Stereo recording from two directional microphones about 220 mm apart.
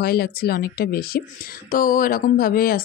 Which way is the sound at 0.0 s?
45° left (ahead or behind).